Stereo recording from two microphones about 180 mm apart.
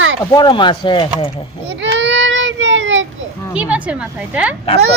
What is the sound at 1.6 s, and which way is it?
Speech, 75° right (ahead or behind).